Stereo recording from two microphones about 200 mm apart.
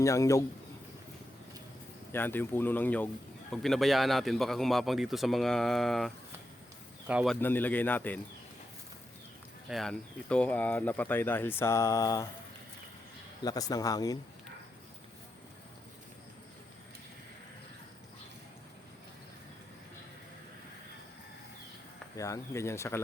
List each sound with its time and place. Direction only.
0.0 s speech: 15° left (ahead or behind)
2.1 s a man's voice: 10° left (ahead or behind)
7.3 s speech: 10° left (ahead or behind)
9.6 s speech: centre (ahead or behind); by 12.3 s 20° left (ahead or behind)
13.4 s speech: 20° left (ahead or behind)
22.1 s speech: 15° left (ahead or behind)